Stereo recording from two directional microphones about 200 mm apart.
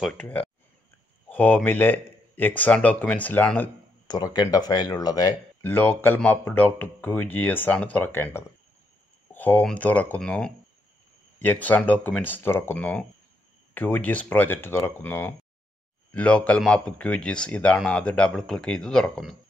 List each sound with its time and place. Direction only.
0.0 s speech: 5° left (ahead or behind)
4.1 s speech: 20° left (ahead or behind)
5.6 s speech: 10° left (ahead or behind)